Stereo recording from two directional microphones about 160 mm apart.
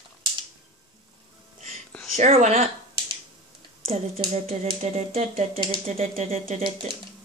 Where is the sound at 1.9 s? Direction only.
5° left (ahead or behind).